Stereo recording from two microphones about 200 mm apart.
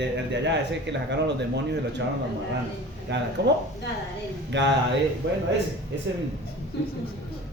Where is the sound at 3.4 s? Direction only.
55° right (ahead or behind).